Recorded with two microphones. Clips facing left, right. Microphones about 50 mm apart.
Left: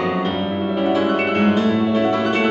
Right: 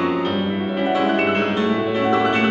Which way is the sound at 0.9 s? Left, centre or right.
Centre.